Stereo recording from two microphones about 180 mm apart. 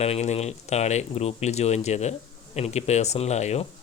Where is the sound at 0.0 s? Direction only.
35° left (ahead or behind).